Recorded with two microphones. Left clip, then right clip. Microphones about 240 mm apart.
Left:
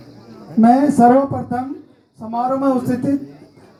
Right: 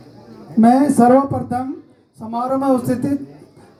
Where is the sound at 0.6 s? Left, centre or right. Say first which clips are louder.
Left 1 dB; right.